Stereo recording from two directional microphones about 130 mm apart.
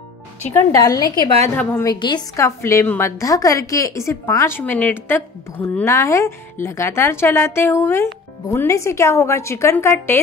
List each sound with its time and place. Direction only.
0.4 s speech: 15° left (ahead or behind)
0.7 s a woman's voice: 30° left (ahead or behind)
1.5 s a woman's voice: 15° left (ahead or behind)
1.9 s a woman's voice: 35° left (ahead or behind)
2.3 s a woman's voice: 20° left (ahead or behind)